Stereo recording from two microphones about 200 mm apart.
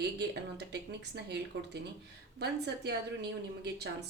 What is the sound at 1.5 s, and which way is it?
A woman's voice, 60° right (ahead or behind).